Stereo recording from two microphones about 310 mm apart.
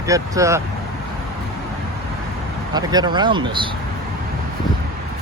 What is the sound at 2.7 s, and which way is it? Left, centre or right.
Speech, centre.